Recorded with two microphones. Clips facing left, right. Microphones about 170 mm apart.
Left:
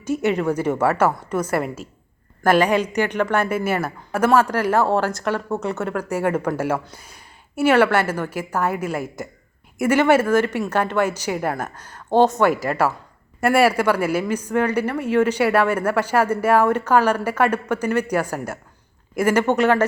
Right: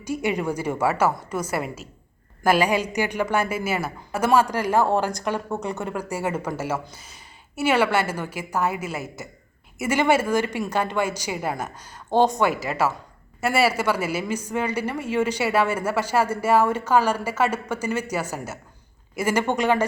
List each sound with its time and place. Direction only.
0.0 s a woman's voice: 10° right (ahead or behind)
7.6 s a woman's voice: 10° right (ahead or behind)
16.2 s speech: 55° left (ahead or behind)
16.5 s a woman's voice: 5° right (ahead or behind)